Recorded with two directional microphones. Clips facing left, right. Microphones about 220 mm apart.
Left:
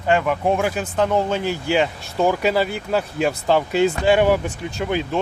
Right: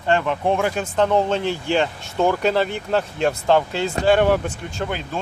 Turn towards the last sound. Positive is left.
turn(degrees=10)  # may be behind; listen again after turning